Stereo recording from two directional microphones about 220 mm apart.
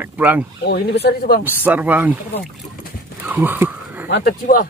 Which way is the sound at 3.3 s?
10° right (ahead or behind).